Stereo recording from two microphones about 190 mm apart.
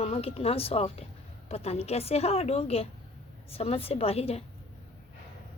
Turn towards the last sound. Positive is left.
turn(degrees=30)  # may be behind; listen again after turning